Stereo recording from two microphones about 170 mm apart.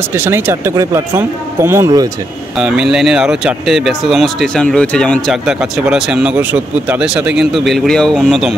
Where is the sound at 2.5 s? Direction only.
5° right (ahead or behind).